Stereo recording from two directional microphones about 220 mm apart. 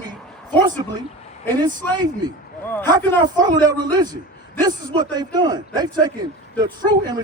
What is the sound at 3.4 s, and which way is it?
A man's voice, 20° right (ahead or behind).